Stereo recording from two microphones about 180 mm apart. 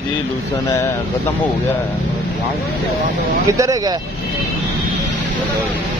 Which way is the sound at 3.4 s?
15° right (ahead or behind).